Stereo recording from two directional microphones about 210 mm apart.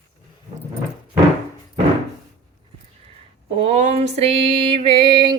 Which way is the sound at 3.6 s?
30° right (ahead or behind).